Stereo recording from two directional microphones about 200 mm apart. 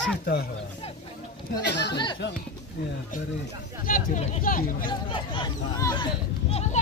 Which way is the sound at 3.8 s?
40° left (ahead or behind).